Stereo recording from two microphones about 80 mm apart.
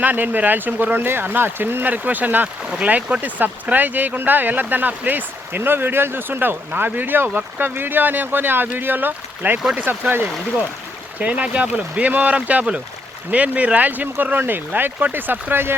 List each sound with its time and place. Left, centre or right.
0.0 s speech: right